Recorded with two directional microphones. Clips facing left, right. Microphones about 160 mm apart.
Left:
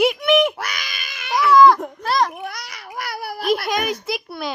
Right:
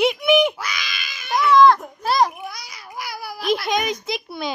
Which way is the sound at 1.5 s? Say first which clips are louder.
Left 1 dB; 5° left (ahead or behind).